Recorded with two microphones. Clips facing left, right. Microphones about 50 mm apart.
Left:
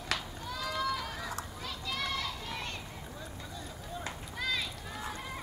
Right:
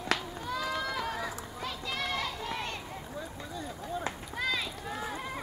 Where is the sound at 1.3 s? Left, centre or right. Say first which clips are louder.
Right 2 dB; centre.